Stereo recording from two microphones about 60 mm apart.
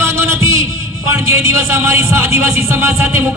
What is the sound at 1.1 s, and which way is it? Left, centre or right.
Speech, right.